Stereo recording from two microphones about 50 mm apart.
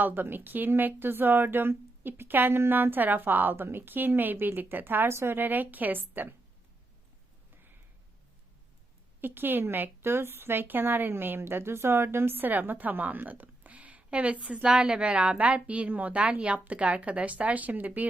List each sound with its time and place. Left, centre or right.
0.0 s a woman's voice: right
5.0 s a woman's voice: right
5.4 s a woman's voice: right
9.2 s a woman's voice: right
14.6 s a woman's voice: centre; by 18.1 s right